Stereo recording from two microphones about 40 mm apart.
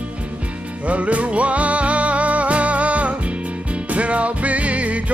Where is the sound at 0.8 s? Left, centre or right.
Right.